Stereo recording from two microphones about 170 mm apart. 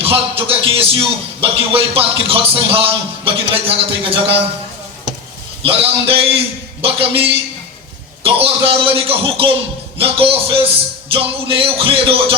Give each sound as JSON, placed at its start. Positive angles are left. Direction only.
{"t": 0.0, "sound": "a man's voice", "side_deg": -35}
{"t": 5.6, "sound": "a man's voice", "side_deg": -35}